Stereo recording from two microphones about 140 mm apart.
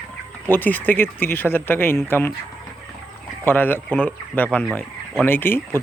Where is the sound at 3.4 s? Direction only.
15° left (ahead or behind).